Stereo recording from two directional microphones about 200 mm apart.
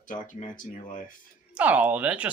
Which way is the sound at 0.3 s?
40° left (ahead or behind).